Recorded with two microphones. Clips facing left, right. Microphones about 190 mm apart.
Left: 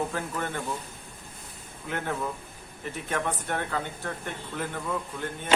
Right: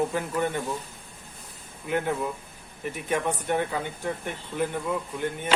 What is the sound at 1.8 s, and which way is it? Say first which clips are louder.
Speech: right 4 dB; 15° right (ahead or behind).